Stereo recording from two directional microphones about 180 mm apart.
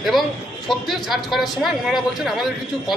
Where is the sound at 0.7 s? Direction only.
Centre (ahead or behind).